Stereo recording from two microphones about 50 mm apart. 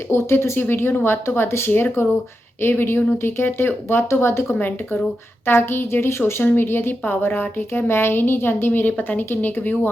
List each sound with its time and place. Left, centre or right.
0.1 s speech: left
1.7 s speech: left
4.5 s speech: left
6.4 s speech: left